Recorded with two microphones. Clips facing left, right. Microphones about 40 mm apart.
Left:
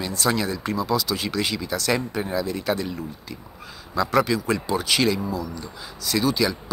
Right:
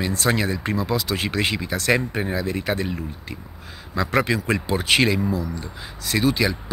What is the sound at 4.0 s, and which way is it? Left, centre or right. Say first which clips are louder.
Speech: even; right.